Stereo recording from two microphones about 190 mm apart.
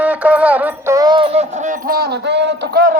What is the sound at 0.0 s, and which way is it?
Music, 5° right (ahead or behind).